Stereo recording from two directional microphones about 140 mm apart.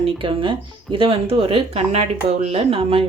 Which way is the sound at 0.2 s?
40° right (ahead or behind).